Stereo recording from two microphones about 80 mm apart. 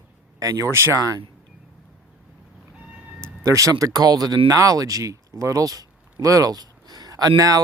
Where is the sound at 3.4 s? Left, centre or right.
Right.